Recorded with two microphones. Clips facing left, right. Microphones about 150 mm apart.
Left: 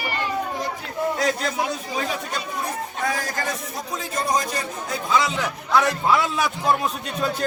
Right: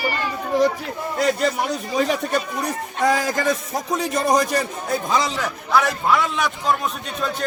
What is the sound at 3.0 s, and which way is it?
A man's voice, 90° right.